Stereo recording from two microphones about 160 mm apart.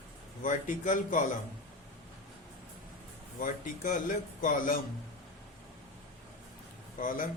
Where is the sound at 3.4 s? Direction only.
55° left (ahead or behind).